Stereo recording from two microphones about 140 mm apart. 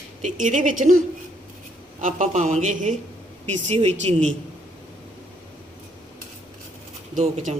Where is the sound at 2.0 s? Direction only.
60° right (ahead or behind).